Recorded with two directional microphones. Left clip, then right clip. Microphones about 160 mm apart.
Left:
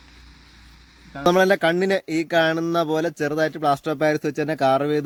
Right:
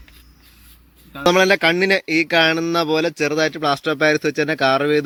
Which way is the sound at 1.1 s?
Centre (ahead or behind).